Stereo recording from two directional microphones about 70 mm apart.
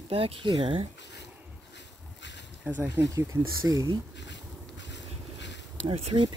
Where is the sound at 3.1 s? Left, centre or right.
Right.